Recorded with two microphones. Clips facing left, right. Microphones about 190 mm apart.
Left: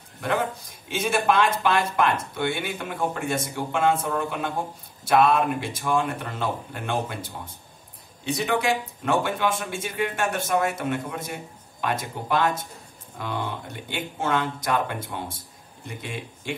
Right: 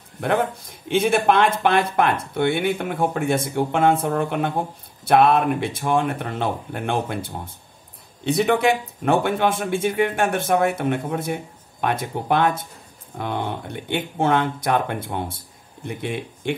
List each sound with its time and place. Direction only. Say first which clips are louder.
0.2 s speech: right 4 dB; 60° right (ahead or behind)
8.3 s speech: right 6 dB; 60° right (ahead or behind)